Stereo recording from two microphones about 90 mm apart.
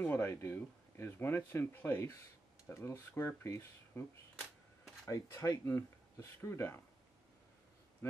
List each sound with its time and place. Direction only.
0.0 s speech: 25° left (ahead or behind)
5.0 s speech: 35° left (ahead or behind)
8.0 s a sound: 30° left (ahead or behind)